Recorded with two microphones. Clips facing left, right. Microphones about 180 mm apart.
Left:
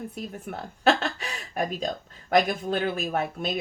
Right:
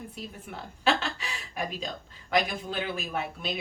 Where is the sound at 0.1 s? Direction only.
50° left (ahead or behind).